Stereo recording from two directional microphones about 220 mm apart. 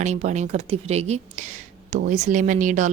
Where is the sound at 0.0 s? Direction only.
30° right (ahead or behind).